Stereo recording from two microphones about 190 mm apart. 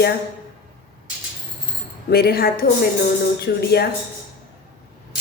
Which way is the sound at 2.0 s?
55° left (ahead or behind).